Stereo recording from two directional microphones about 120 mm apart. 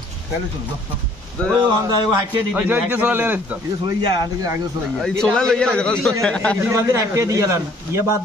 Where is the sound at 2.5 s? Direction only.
15° right (ahead or behind).